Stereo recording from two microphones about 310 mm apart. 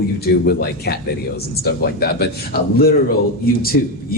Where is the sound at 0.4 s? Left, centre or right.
Left.